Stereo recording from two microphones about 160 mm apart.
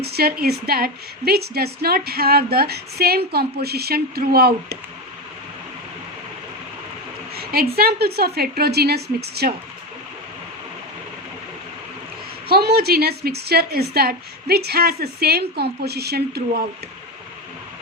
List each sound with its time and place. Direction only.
0.0 s a woman's voice: 75° right (ahead or behind)
7.3 s a woman's voice: 75° right (ahead or behind); by 9.5 s 90° right
12.5 s a woman's voice: 75° right (ahead or behind)